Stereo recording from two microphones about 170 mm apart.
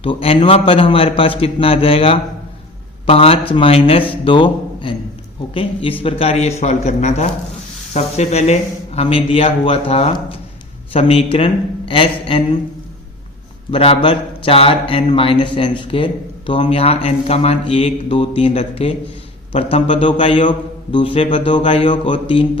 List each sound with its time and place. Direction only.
0.0 s a man's voice: 35° left (ahead or behind)
6.0 s a man's voice: 35° left (ahead or behind)
13.7 s a man's voice: 35° left (ahead or behind)